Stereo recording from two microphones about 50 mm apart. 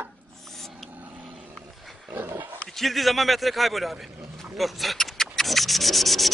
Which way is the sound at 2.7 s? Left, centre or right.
Centre.